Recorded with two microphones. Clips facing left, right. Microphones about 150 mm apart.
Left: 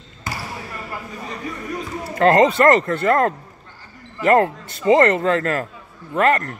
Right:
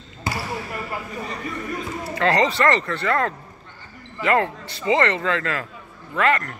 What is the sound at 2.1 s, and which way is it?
A man's voice, 45° left (ahead or behind).